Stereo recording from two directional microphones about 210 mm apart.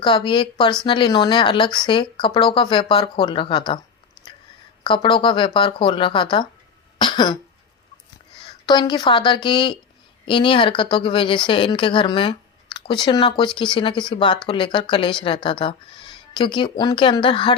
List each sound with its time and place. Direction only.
0.0 s speech: 25° left (ahead or behind)
4.8 s speech: 20° left (ahead or behind)
8.6 s speech: 20° left (ahead or behind)